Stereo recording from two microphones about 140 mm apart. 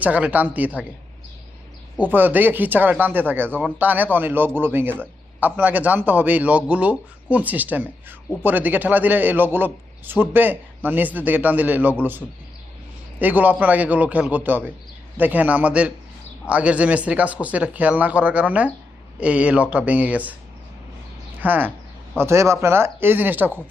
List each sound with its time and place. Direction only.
0.0 s speech: 10° right (ahead or behind)
2.0 s speech: 15° right (ahead or behind)
21.4 s speech: 15° right (ahead or behind)